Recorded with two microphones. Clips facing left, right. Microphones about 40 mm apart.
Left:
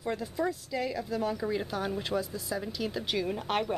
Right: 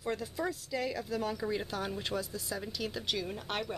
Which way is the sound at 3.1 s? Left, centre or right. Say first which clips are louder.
Left 6 dB; centre.